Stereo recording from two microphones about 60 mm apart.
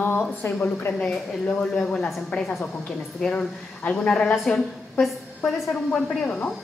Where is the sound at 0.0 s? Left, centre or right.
Left.